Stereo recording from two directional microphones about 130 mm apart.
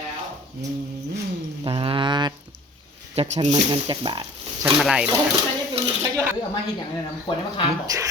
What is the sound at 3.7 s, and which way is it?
Speech, 35° right (ahead or behind).